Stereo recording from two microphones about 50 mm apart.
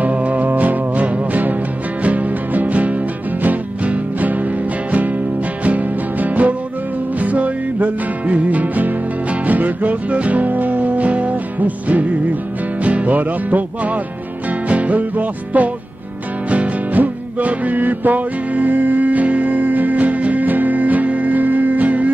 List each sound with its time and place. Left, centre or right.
0.0 s music: right
5.6 s music: right